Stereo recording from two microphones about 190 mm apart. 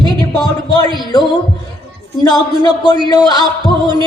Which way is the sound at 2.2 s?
20° left (ahead or behind).